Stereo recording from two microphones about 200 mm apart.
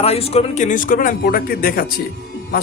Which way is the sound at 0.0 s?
30° left (ahead or behind).